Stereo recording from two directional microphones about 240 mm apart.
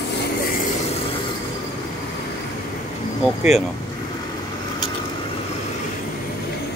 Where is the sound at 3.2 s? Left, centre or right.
Centre.